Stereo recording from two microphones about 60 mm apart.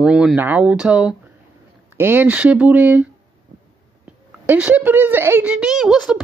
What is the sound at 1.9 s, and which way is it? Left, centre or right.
Speech, right.